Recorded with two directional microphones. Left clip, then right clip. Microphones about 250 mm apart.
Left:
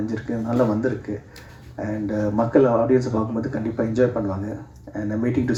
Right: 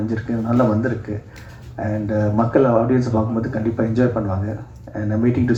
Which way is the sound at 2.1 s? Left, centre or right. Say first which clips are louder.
Right 2 dB; left.